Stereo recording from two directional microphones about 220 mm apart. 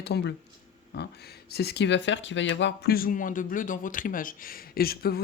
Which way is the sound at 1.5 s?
50° left (ahead or behind).